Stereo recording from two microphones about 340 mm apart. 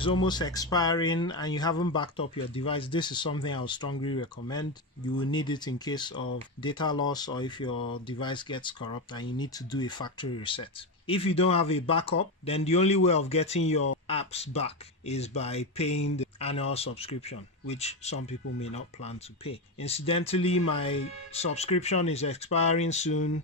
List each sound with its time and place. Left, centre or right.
0.0 s speech: centre